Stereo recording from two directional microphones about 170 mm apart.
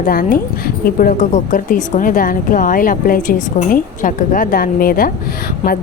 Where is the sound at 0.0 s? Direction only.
55° left (ahead or behind).